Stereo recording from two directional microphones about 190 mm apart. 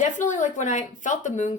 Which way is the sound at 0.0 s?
40° left (ahead or behind).